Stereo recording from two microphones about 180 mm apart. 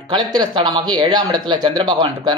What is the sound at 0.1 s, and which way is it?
Speech, 25° right (ahead or behind).